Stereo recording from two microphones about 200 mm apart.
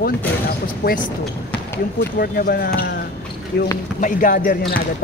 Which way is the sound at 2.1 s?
45° left (ahead or behind).